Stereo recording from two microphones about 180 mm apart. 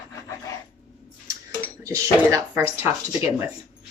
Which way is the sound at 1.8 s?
15° right (ahead or behind).